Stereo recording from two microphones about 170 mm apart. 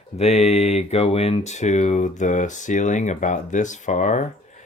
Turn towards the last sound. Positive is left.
turn(degrees=45)  # may be behind; listen again after turning